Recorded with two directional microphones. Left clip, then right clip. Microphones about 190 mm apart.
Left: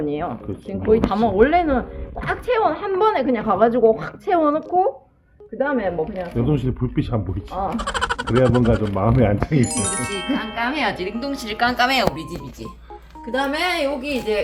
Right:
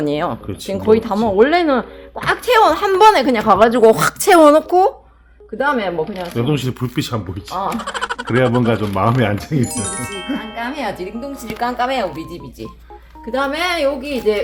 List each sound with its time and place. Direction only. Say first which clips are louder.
0.0 s speech: right 5 dB; 60° right (ahead or behind)
6.3 s speech: right 4 dB; 15° right (ahead or behind)
7.8 s speech: even; centre (ahead or behind)
8.7 s speech: right 3 dB; 20° right (ahead or behind)
9.3 s speech: even; centre (ahead or behind)
10.8 s a woman's voice: left 1 dB; 30° right (ahead or behind)
13.3 s speech: right 3 dB; 50° right (ahead or behind)